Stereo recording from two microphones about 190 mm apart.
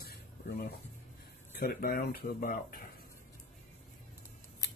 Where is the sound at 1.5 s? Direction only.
50° left (ahead or behind).